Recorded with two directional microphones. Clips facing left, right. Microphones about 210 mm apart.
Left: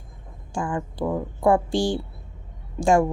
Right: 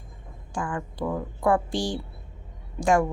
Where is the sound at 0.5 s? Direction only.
25° left (ahead or behind).